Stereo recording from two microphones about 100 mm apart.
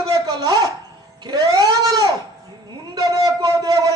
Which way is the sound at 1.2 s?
45° right (ahead or behind).